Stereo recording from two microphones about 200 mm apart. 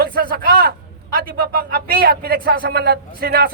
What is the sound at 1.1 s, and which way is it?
A man's voice, 50° right (ahead or behind).